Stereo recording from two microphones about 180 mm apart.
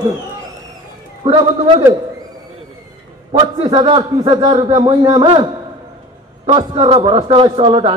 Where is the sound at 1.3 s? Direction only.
25° right (ahead or behind).